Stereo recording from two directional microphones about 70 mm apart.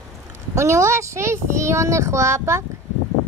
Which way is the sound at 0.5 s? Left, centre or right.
Right.